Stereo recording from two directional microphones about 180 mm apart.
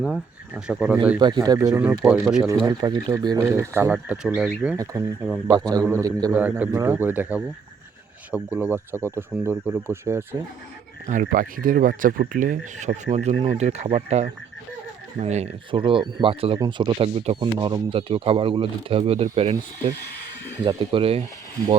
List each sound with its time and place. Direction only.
0.0 s speech: centre (ahead or behind)
1.2 s speech: 20° right (ahead or behind)
1.7 s speech: 10° right (ahead or behind)
2.6 s speech: 20° right (ahead or behind)
6.3 s speech: 10° right (ahead or behind)
11.0 s speech: 45° right (ahead or behind)